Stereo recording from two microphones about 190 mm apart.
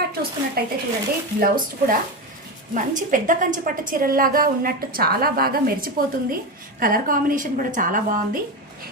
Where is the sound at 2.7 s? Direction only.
45° right (ahead or behind).